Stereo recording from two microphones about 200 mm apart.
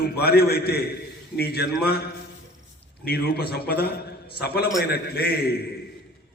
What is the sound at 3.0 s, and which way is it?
A man's voice, 50° left (ahead or behind).